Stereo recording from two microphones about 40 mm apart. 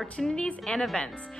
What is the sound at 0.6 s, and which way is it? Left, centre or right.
Speech, centre.